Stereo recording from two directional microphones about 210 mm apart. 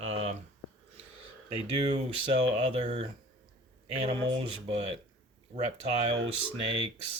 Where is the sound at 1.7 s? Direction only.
30° right (ahead or behind).